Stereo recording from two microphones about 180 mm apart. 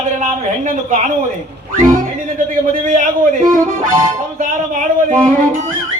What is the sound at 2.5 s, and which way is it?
Speech, 45° right (ahead or behind).